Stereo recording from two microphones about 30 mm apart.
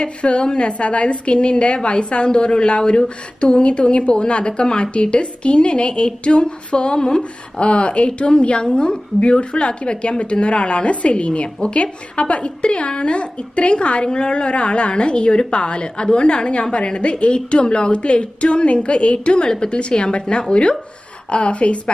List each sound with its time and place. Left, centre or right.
0.0 s a woman's voice: left